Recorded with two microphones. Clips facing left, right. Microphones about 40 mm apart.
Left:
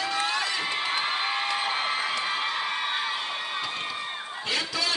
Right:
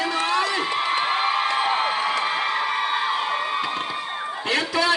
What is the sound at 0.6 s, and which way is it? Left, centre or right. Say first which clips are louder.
Crowd: right 5 dB; centre.